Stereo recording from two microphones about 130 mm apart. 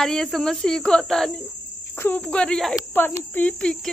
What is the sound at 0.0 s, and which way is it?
Speech, 5° left (ahead or behind).